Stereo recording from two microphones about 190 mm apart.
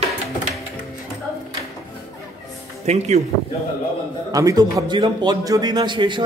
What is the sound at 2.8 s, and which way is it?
Speech, 35° right (ahead or behind).